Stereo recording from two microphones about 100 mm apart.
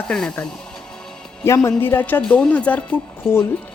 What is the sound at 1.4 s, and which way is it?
A woman's voice, 30° left (ahead or behind).